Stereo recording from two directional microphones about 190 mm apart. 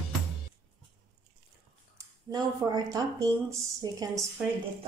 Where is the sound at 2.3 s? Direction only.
20° right (ahead or behind).